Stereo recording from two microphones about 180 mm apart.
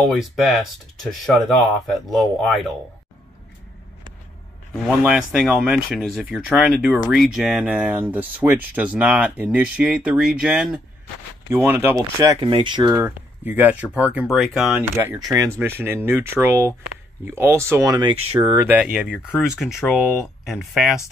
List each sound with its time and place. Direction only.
0.0 s speech: centre (ahead or behind)
5.0 s speech: 5° right (ahead or behind)
12.2 s speech: 25° right (ahead or behind)
18.1 s speech: 30° right (ahead or behind)
18.5 s speech: 10° right (ahead or behind)